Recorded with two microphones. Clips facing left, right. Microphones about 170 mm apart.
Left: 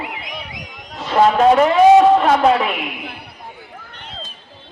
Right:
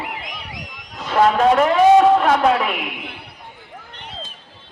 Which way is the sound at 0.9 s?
Centre (ahead or behind).